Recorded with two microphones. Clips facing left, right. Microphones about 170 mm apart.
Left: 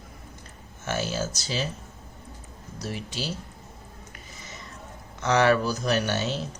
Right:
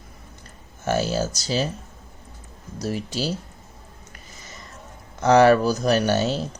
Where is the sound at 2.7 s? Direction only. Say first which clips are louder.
Right 7 dB; 40° right (ahead or behind).